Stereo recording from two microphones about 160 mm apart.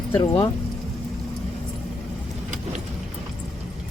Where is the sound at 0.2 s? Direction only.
30° left (ahead or behind).